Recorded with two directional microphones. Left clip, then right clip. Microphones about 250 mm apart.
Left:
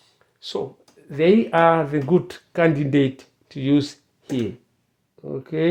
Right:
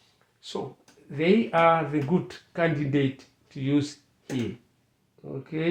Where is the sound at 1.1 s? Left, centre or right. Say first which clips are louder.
Left 6 dB; left.